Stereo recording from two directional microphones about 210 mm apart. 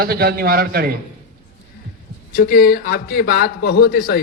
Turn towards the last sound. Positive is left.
turn(degrees=45)  # may be behind; listen again after turning